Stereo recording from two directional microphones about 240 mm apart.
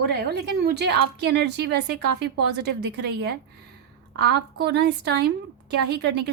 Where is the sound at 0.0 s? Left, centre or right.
Right.